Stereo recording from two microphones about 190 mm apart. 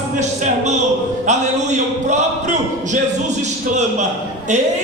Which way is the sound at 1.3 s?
40° right (ahead or behind).